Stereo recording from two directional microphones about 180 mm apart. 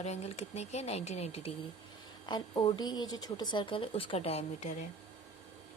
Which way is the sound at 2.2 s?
20° left (ahead or behind).